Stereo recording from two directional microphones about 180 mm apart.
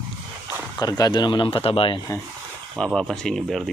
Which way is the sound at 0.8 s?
25° left (ahead or behind).